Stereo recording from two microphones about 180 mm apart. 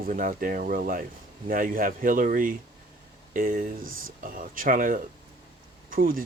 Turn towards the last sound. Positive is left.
turn(degrees=-50)  # may be behind; listen again after turning